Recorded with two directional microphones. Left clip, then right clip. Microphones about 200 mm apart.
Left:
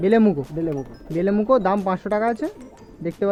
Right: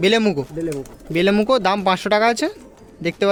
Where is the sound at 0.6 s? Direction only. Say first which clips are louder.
Even; 55° left (ahead or behind).